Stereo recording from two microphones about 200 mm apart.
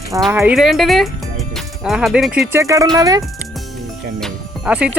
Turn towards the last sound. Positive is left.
turn(degrees=-5)  # may be behind; listen again after turning